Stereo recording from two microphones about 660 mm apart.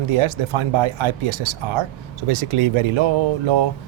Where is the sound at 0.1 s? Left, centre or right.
Right.